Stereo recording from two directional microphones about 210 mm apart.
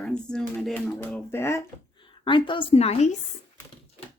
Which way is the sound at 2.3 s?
25° left (ahead or behind).